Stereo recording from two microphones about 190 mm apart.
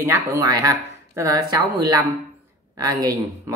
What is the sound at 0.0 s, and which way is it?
Speech, 15° right (ahead or behind).